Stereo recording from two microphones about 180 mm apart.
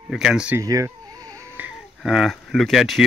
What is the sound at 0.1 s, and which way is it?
Speech, 5° right (ahead or behind).